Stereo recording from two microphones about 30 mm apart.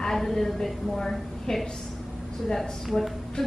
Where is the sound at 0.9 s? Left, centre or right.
Left.